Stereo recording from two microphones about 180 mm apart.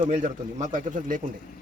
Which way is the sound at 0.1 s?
45° right (ahead or behind).